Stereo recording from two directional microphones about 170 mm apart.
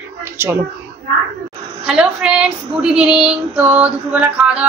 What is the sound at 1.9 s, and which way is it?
Speech, 5° right (ahead or behind).